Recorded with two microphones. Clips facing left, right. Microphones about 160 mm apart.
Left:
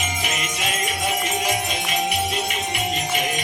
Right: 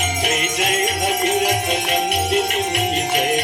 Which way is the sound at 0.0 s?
60° right (ahead or behind).